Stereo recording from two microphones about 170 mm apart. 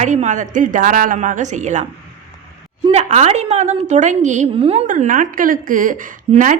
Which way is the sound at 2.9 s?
40° right (ahead or behind).